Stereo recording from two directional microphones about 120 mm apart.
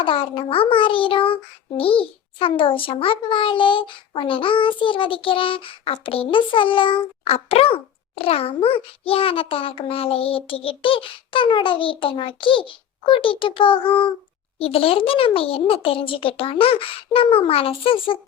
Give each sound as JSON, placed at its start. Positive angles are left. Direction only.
{"t": 0.0, "sound": "child singing", "side_deg": 45}